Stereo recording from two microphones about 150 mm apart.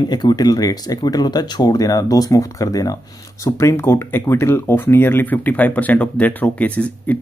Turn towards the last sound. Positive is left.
turn(degrees=10)  # may be behind; listen again after turning